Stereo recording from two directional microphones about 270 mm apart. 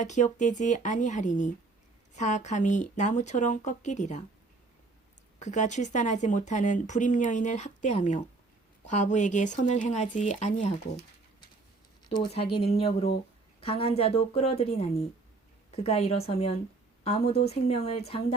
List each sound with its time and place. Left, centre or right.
0.0 s speech: left
5.4 s speech: left
12.0 s speech: centre